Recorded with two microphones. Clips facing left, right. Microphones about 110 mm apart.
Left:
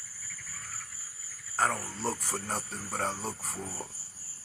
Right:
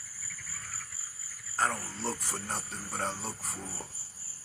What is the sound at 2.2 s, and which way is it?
Music, 45° left (ahead or behind).